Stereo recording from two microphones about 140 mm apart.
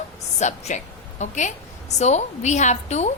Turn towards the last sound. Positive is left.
turn(degrees=55)  # may be behind; listen again after turning